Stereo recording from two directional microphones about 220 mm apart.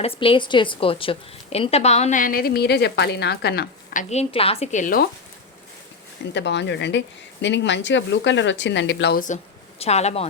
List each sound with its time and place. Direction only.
0.0 s a woman's voice: 25° left (ahead or behind); by 4.0 s 45° left (ahead or behind)
4.1 s a woman's voice: 30° left (ahead or behind)
6.3 s speech: 50° left (ahead or behind)
9.2 s a woman's voice: 30° left (ahead or behind)